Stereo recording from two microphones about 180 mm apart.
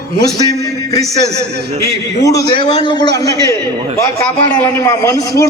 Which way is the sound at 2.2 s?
20° left (ahead or behind).